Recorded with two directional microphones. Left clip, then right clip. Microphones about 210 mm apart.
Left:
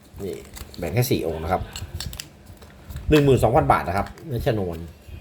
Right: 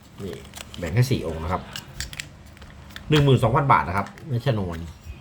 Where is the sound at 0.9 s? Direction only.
5° left (ahead or behind).